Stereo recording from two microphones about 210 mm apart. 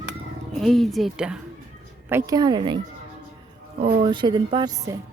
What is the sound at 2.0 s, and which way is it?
Speech, 15° right (ahead or behind).